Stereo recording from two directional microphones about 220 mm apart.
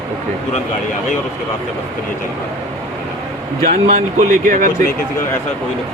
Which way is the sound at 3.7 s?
30° right (ahead or behind).